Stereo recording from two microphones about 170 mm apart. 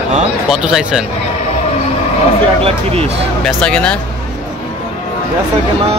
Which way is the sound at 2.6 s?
35° right (ahead or behind).